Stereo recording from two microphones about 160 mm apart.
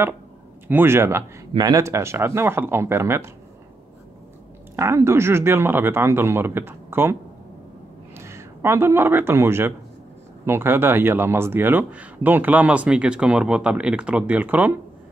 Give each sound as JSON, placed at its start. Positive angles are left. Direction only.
{"t": 0.7, "sound": "speech", "side_deg": -15}
{"t": 4.7, "sound": "speech", "side_deg": -15}
{"t": 8.3, "sound": "speech", "side_deg": -15}